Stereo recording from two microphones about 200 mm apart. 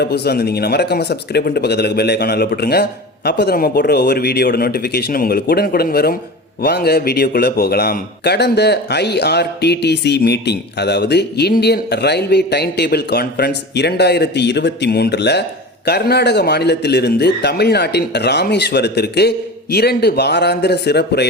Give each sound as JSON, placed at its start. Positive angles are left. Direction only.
{"t": 0.0, "sound": "a man's voice", "side_deg": 55}